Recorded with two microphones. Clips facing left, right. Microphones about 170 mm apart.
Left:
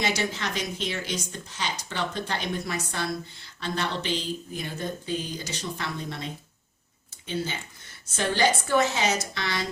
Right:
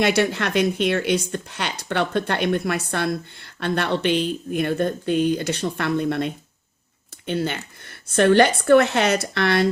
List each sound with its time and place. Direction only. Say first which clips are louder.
0.0 s speech: right 8 dB; 65° right (ahead or behind)